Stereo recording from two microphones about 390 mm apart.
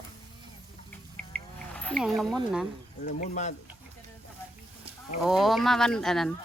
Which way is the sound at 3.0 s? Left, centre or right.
Centre.